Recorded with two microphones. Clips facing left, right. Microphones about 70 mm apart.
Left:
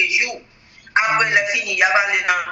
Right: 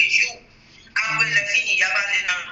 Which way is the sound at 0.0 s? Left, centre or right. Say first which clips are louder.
Left 1 dB; left.